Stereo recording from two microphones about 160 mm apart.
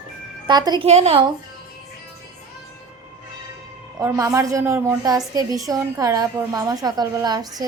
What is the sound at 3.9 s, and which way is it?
A woman's voice, 20° right (ahead or behind).